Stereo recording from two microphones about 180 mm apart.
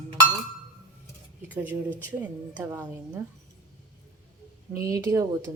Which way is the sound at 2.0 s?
10° right (ahead or behind).